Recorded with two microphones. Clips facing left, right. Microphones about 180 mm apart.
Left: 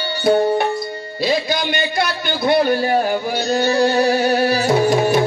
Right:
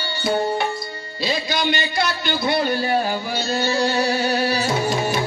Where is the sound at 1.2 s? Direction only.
55° left (ahead or behind).